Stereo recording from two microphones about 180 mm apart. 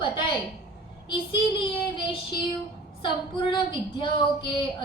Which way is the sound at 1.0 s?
25° left (ahead or behind).